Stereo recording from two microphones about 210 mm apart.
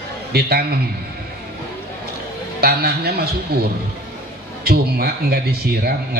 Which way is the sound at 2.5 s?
45° right (ahead or behind).